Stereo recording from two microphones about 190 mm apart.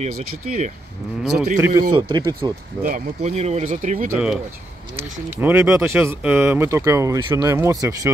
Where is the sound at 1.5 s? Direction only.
15° right (ahead or behind).